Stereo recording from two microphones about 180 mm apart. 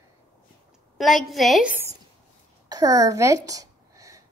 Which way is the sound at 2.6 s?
20° right (ahead or behind).